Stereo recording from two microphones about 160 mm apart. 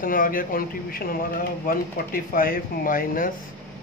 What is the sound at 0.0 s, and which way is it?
Speech, 60° left (ahead or behind).